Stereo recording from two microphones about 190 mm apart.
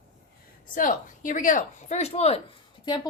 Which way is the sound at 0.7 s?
45° left (ahead or behind).